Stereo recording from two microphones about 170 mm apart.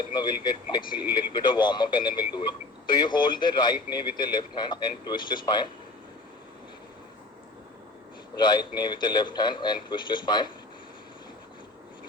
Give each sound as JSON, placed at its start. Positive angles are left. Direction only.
{"t": 0.0, "sound": "speech", "side_deg": 25}
{"t": 8.4, "sound": "speech", "side_deg": 25}